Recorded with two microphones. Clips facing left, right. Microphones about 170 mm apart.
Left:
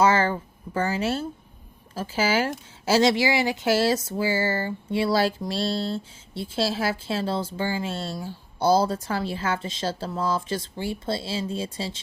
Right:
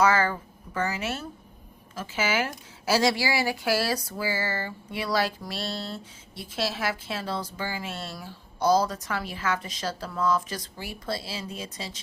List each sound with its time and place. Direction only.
0.0 s speech: 30° left (ahead or behind)